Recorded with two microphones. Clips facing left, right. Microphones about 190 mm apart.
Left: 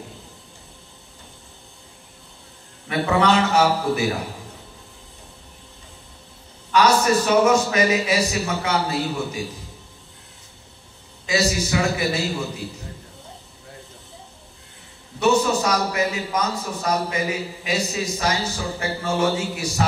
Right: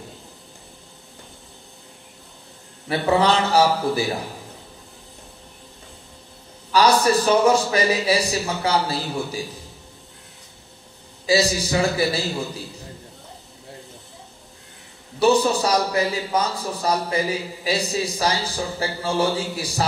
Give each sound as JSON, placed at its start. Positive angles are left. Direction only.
{"t": 2.9, "sound": "a man's voice", "side_deg": -35}
{"t": 6.7, "sound": "a man's voice", "side_deg": -35}
{"t": 11.2, "sound": "a man's voice", "side_deg": -30}
{"t": 15.1, "sound": "a man's voice", "side_deg": -35}